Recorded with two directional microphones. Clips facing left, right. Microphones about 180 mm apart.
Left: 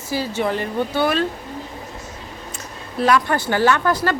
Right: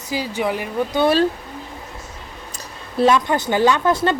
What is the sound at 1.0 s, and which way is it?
Speech, 30° right (ahead or behind).